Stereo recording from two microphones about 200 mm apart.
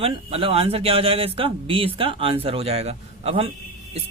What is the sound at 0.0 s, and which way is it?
Speech, 30° right (ahead or behind).